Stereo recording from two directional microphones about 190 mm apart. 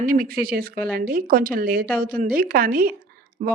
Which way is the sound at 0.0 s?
50° right (ahead or behind).